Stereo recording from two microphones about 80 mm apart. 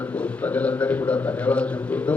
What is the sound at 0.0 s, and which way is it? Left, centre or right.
A man's voice, centre.